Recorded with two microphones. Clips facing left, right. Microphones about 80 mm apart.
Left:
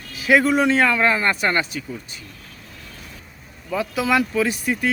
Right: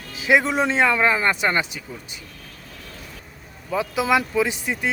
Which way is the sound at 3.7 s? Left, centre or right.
Centre.